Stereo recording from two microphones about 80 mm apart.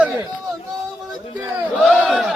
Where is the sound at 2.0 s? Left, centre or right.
Centre.